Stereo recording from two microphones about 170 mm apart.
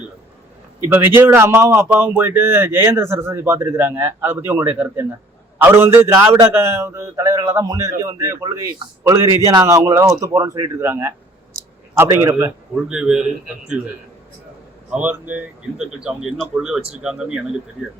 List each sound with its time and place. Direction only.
0.9 s speech: 10° right (ahead or behind)
12.9 s a man's voice: 5° right (ahead or behind)
14.8 s a man's voice: 10° right (ahead or behind)